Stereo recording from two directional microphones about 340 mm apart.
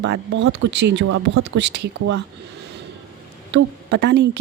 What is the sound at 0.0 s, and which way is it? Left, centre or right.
Speech, right.